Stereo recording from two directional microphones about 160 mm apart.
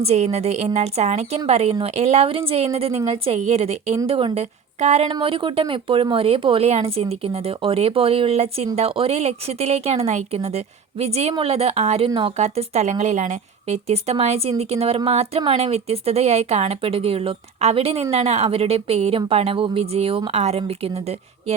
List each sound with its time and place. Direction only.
0.0 s a woman's voice: 40° right (ahead or behind)
4.8 s a woman's voice: 45° right (ahead or behind)
5.0 s speech: 30° right (ahead or behind)